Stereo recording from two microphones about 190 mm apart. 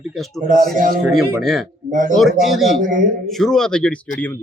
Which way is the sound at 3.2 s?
Centre (ahead or behind).